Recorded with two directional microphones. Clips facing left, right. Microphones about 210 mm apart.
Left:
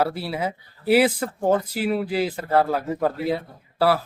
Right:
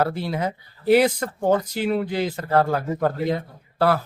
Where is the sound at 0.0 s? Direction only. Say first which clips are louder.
Right 1 dB; 5° left (ahead or behind).